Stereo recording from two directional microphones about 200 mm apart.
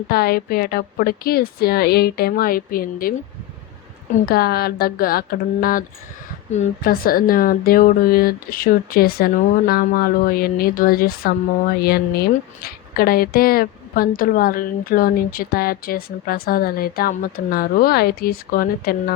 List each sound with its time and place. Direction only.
0.1 s speech: 50° left (ahead or behind)
4.3 s speech: 50° left (ahead or behind)